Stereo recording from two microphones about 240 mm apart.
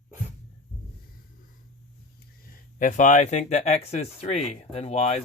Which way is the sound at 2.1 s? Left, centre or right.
Left.